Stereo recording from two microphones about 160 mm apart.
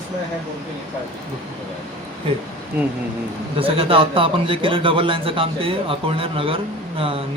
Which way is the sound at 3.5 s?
35° right (ahead or behind).